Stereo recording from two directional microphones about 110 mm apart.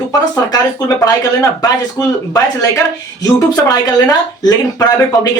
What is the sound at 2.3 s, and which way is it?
Speech, 30° left (ahead or behind).